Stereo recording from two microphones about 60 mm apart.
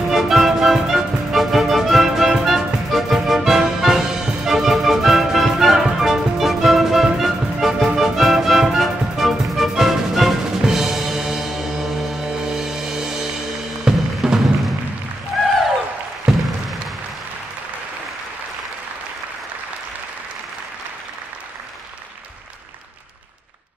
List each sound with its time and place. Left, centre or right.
0.1 s music: centre
13.8 s drum: centre
15.3 s a sound: centre